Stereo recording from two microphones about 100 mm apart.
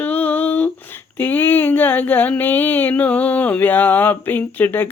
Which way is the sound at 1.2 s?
20° left (ahead or behind).